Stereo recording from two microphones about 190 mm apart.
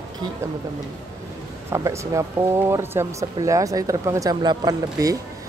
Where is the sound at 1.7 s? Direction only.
15° right (ahead or behind).